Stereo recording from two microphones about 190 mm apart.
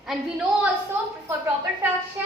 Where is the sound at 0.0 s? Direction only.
5° right (ahead or behind).